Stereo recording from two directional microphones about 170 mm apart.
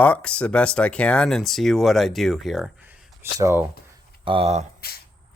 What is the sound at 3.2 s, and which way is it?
Speech, 15° right (ahead or behind).